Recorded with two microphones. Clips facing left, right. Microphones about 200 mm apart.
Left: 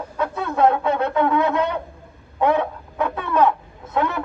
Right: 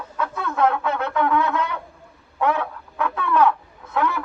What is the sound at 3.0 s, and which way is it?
Bird, 25° left (ahead or behind).